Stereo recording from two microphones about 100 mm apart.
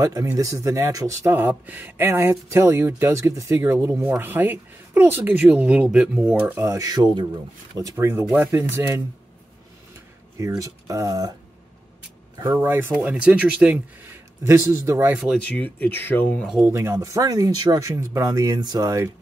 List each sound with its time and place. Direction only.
0.0 s speech: 35° right (ahead or behind)
1.3 s speech: 20° right (ahead or behind)
6.7 s speech: 40° right (ahead or behind)
7.8 s speech: 25° right (ahead or behind)
10.6 s speech: 35° right (ahead or behind)
12.6 s speech: 25° right (ahead or behind)
13.1 s speech: 10° right (ahead or behind)
14.4 s speech: 30° right (ahead or behind)
15.3 s speech: 10° left (ahead or behind)
16.5 s speech: 20° right (ahead or behind)